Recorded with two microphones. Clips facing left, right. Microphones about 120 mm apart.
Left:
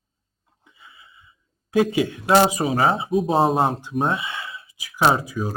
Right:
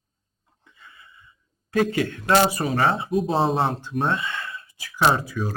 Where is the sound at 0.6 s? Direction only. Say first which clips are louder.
Even; 10° left (ahead or behind).